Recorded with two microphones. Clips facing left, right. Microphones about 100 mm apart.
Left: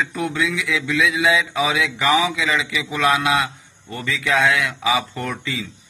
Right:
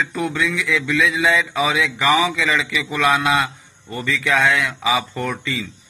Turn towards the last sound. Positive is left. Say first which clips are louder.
# right 2 dB
turn(degrees=0)  # may be behind; listen again after turning